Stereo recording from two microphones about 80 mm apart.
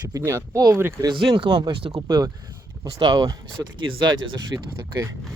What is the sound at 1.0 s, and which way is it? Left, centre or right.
Speech, right.